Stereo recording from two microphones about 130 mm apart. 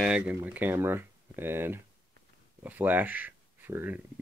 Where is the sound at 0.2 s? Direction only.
15° right (ahead or behind).